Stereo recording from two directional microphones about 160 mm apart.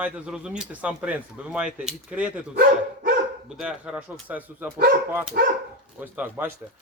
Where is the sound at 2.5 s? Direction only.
60° right (ahead or behind).